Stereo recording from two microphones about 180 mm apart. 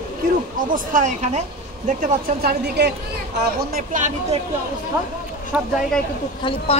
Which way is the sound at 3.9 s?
45° right (ahead or behind).